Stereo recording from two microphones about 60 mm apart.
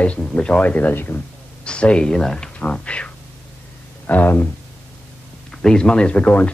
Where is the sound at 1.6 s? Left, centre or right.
Centre; by 4.5 s left.